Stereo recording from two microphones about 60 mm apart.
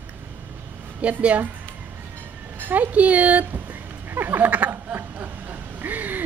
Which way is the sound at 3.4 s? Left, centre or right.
Right.